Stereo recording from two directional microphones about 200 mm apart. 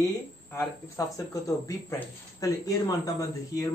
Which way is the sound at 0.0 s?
15° left (ahead or behind).